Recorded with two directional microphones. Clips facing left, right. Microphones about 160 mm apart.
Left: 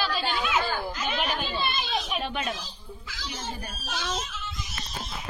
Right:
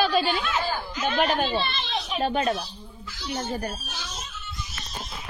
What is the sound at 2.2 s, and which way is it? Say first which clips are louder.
Speech: right 6 dB; 40° right (ahead or behind).